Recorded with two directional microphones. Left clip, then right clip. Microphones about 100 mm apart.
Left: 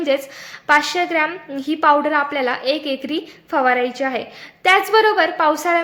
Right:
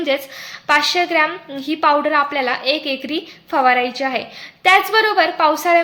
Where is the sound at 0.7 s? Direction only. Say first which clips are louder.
Right 1 dB; 45° left (ahead or behind).